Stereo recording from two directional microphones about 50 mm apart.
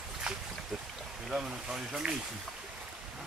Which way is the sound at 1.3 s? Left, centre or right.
Centre.